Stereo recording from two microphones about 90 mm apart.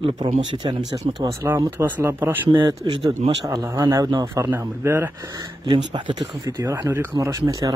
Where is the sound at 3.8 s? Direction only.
40° right (ahead or behind).